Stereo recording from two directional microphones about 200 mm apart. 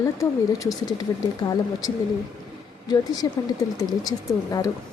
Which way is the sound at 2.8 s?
20° left (ahead or behind).